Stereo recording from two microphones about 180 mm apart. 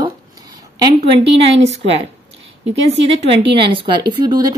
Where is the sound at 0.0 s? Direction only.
20° right (ahead or behind).